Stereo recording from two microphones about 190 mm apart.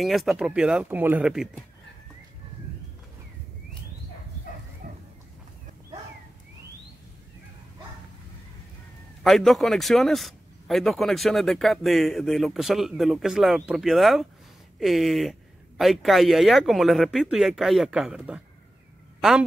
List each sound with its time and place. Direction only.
0.0 s speech: centre (ahead or behind)
4.8 s chicken: 45° right (ahead or behind)
9.2 s speech: centre (ahead or behind)